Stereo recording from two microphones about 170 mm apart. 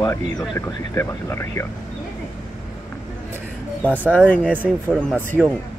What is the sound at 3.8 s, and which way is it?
Speech, 10° left (ahead or behind).